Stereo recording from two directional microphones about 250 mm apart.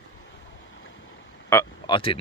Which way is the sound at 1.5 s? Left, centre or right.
Centre.